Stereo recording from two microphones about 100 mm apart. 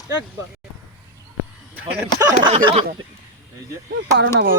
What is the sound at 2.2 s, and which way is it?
Speech, 40° right (ahead or behind).